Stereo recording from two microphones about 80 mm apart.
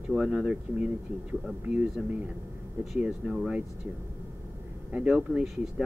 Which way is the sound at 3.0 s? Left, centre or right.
Centre.